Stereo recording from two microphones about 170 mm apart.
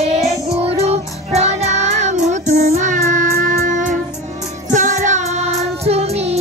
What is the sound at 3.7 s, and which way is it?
Music, 50° right (ahead or behind).